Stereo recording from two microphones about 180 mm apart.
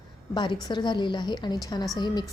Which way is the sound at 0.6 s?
25° left (ahead or behind).